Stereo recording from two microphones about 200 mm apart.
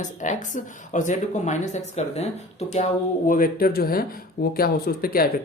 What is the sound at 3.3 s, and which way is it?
Speech, 45° left (ahead or behind).